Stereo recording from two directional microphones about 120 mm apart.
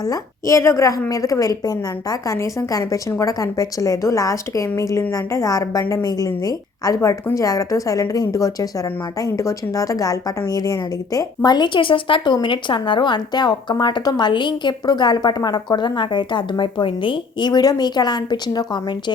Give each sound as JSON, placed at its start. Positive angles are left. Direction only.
{"t": 0.0, "sound": "a woman's voice", "side_deg": 30}